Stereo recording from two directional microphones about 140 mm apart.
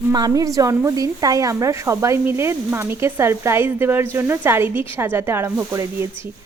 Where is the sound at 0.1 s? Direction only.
25° right (ahead or behind).